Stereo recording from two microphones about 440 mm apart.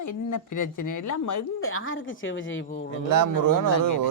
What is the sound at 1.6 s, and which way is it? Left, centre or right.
Speech, left.